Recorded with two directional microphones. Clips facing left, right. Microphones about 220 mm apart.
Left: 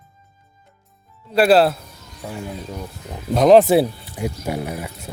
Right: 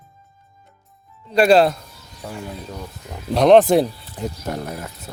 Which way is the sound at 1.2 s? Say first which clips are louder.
Even; 5° left (ahead or behind).